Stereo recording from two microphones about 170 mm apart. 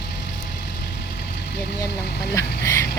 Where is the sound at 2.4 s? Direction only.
20° left (ahead or behind).